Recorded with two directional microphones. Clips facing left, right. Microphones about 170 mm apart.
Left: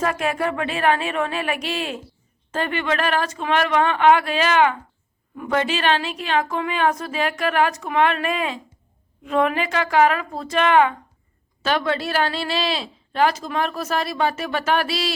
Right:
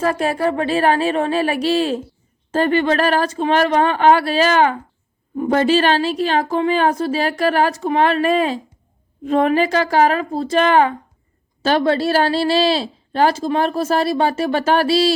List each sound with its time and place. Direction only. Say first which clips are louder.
0.0 s speech: right 4 dB; 35° right (ahead or behind)